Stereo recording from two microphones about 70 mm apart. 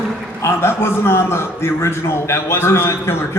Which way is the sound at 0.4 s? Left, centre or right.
Left.